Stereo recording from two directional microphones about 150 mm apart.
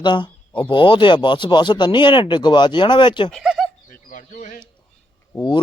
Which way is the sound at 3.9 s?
60° left (ahead or behind).